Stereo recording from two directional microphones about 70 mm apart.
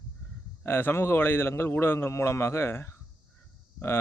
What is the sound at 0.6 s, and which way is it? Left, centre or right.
Speech, left.